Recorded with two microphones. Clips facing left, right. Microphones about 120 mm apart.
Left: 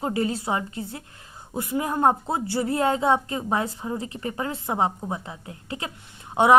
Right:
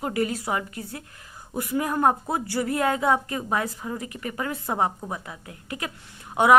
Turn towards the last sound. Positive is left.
turn(degrees=25)  # may be behind; listen again after turning